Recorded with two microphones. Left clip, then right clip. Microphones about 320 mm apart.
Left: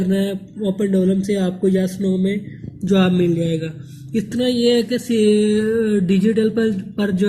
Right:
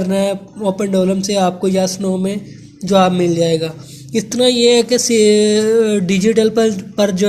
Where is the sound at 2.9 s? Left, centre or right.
Centre.